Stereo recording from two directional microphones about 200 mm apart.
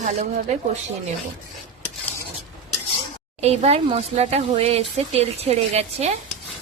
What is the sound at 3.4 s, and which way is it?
Speech, 30° right (ahead or behind).